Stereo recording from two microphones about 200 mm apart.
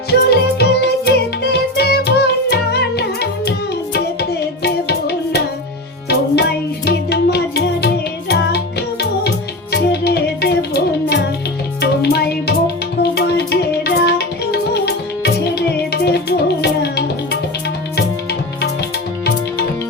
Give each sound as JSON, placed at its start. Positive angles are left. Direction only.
{"t": 0.1, "sound": "music", "side_deg": 55}